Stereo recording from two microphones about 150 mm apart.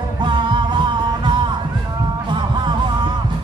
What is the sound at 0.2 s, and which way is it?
Music, 30° right (ahead or behind).